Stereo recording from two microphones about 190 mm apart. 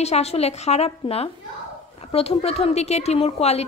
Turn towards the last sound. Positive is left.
turn(degrees=35)  # may be behind; listen again after turning